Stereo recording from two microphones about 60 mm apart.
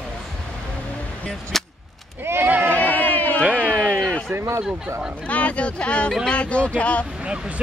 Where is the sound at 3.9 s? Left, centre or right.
Centre.